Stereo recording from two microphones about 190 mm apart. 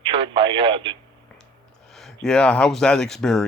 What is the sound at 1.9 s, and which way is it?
Speech, centre (ahead or behind).